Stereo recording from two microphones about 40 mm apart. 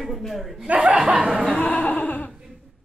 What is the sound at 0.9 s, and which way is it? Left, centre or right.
Speech, centre.